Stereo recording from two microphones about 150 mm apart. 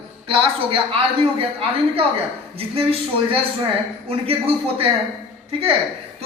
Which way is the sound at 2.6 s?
40° right (ahead or behind).